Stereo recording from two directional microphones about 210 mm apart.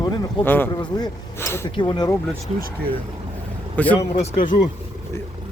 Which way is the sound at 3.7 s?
5° left (ahead or behind).